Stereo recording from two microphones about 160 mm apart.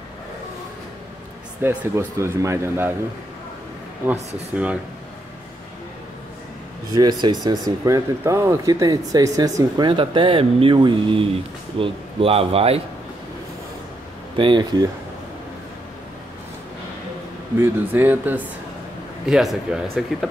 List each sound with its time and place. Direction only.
1.6 s speech: 10° right (ahead or behind)
4.0 s speech: 15° right (ahead or behind)
6.9 s speech: 25° right (ahead or behind)
14.3 s speech: 30° right (ahead or behind)
17.6 s speech: 10° right (ahead or behind)